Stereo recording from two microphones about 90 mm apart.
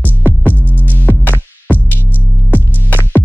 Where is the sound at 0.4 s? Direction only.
20° left (ahead or behind).